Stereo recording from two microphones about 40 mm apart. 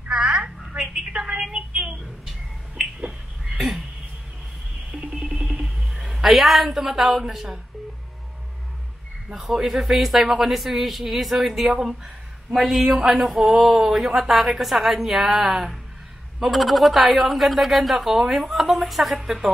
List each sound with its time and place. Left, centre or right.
0.1 s telephone: centre
0.7 s a sound: centre
1.7 s a sound: right
3.1 s a sound: centre
4.9 s music: right
5.9 s a woman's voice: centre
9.3 s a woman's voice: centre
12.8 s a woman's voice: centre
13.1 s speech: centre